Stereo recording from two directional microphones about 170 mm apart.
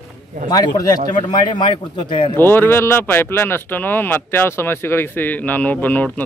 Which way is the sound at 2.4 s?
15° left (ahead or behind).